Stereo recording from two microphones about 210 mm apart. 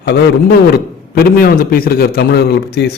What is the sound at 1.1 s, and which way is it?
A man's voice, 45° left (ahead or behind).